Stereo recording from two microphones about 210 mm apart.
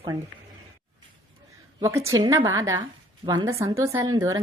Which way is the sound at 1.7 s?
15° right (ahead or behind).